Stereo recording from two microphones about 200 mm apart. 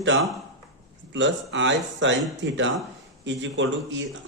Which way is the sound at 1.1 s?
65° right (ahead or behind).